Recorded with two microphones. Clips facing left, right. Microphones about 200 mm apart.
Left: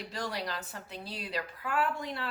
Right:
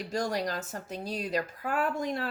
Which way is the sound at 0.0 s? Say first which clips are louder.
Right 6 dB; 45° right (ahead or behind).